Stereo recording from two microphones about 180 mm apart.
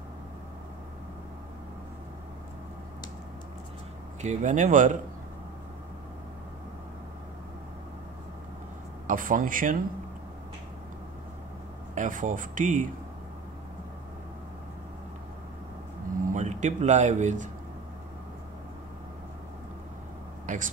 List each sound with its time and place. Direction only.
4.2 s speech: 40° right (ahead or behind)
9.0 s speech: 50° right (ahead or behind)
11.9 s speech: 45° right (ahead or behind)
16.3 s speech: 45° right (ahead or behind)
20.4 s speech: 45° right (ahead or behind)